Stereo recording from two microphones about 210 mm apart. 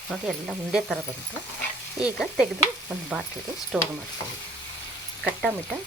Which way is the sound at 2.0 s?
5° right (ahead or behind).